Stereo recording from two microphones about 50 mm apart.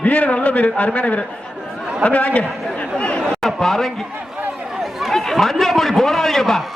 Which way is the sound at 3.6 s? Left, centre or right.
Centre.